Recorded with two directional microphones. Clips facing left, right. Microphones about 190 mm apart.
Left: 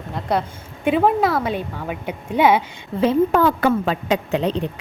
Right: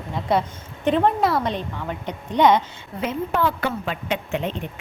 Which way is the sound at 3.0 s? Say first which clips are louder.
Left 8 dB; 30° left (ahead or behind).